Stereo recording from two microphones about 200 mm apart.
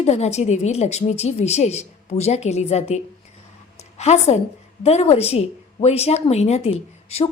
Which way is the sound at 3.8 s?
35° left (ahead or behind).